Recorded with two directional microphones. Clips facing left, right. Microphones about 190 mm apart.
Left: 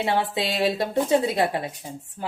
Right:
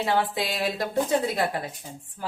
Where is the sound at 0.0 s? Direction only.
25° left (ahead or behind).